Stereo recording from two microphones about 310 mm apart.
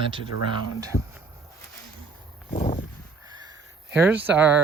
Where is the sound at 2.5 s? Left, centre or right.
Left.